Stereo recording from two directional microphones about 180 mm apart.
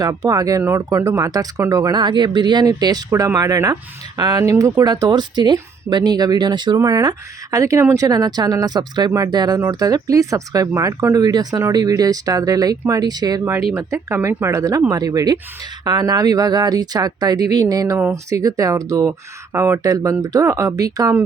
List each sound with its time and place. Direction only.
0.0 s speech: 20° right (ahead or behind)